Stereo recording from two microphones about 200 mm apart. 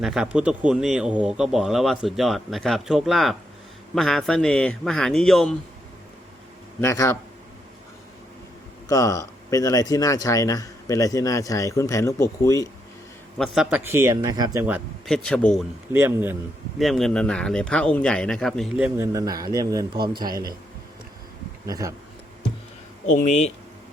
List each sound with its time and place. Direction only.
0.0 s a man's voice: centre (ahead or behind)
6.8 s speech: 15° left (ahead or behind)
8.9 s speech: 15° left (ahead or behind)
13.4 s speech: centre (ahead or behind)
15.1 s a man's voice: 5° left (ahead or behind)
15.9 s speech: 10° right (ahead or behind)
16.7 s a man's voice: centre (ahead or behind)
18.9 s speech: 15° right (ahead or behind)
21.7 s speech: 15° right (ahead or behind)
23.1 s speech: 35° left (ahead or behind)